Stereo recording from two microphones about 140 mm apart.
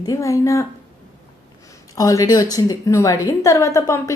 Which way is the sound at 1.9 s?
25° left (ahead or behind).